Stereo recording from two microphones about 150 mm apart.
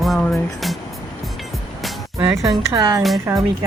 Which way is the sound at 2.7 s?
20° right (ahead or behind).